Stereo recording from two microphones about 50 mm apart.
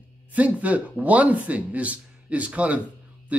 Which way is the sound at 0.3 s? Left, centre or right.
Right.